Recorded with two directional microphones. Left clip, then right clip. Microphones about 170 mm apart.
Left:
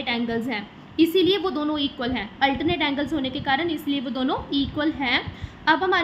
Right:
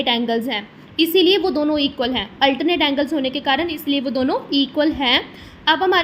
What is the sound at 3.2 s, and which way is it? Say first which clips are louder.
Speech: right 6 dB; 25° left (ahead or behind).